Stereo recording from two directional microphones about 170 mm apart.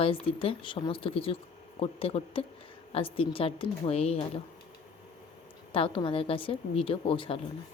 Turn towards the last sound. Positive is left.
turn(degrees=30)  # may be behind; listen again after turning